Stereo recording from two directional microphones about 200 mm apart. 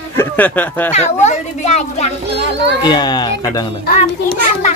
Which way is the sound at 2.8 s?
20° left (ahead or behind).